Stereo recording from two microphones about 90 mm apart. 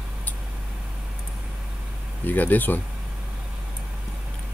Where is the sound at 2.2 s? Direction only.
20° left (ahead or behind).